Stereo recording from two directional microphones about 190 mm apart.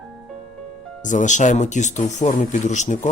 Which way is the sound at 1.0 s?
40° left (ahead or behind).